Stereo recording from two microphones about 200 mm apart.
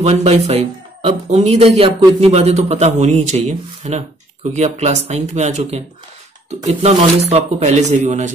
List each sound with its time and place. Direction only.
0.0 s a man's voice: 30° right (ahead or behind)